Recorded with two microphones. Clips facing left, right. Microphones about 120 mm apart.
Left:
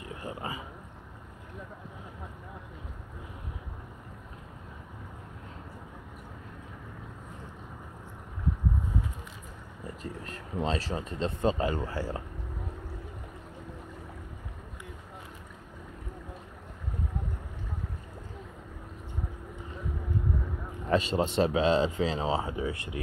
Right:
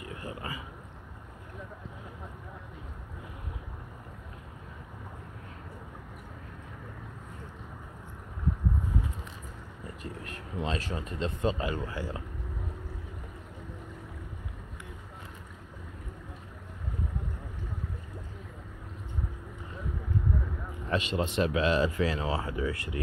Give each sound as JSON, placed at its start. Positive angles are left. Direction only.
{"t": 0.2, "sound": "a sound", "side_deg": 25}
{"t": 10.2, "sound": "speech", "side_deg": 30}
{"t": 20.9, "sound": "speech", "side_deg": 35}